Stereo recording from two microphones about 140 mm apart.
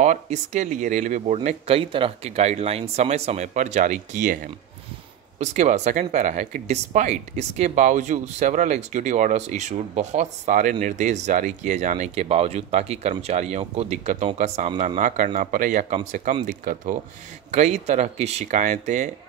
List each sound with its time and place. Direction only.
0.0 s speech: 60° right (ahead or behind)
1.8 s speech: 40° right (ahead or behind); by 4.4 s 65° right (ahead or behind)
5.4 s speech: 55° right (ahead or behind)
12.3 s speech: 45° right (ahead or behind)
15.0 s speech: 65° right (ahead or behind)
17.5 s speech: 55° right (ahead or behind)